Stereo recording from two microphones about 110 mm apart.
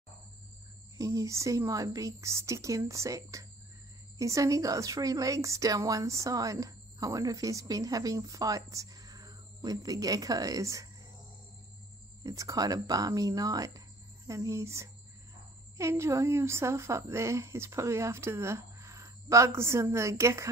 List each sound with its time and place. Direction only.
0.9 s a woman's voice: 30° right (ahead or behind)
12.2 s a woman's voice: 30° right (ahead or behind)